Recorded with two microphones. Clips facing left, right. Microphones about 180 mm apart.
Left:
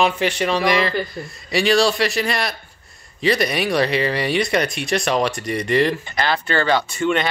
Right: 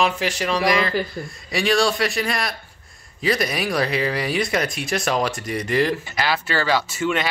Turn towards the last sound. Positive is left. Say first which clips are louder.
# left 2 dB
turn(degrees=-5)  # may be behind; listen again after turning